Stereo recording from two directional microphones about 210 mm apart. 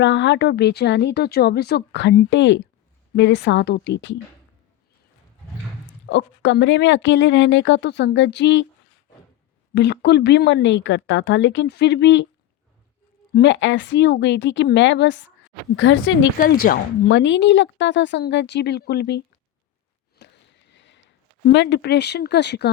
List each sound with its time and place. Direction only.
0.0 s a woman's voice: 55° left (ahead or behind)
5.8 s a woman's voice: 60° left (ahead or behind)
9.7 s a woman's voice: 55° left (ahead or behind)
13.3 s a woman's voice: 60° left (ahead or behind)
20.1 s sniff: 55° left (ahead or behind)
21.5 s speech: 55° left (ahead or behind)